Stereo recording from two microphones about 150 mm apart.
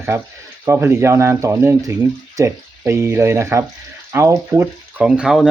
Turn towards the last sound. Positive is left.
turn(degrees=-5)  # may be behind; listen again after turning